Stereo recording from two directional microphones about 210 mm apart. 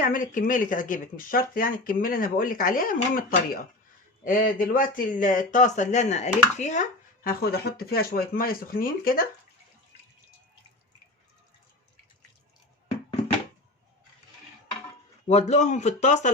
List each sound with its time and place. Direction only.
0.0 s speech: 40° left (ahead or behind)
7.3 s speech: 50° left (ahead or behind)
15.3 s speech: 30° left (ahead or behind)